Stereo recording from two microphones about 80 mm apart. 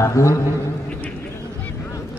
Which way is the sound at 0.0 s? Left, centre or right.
Left.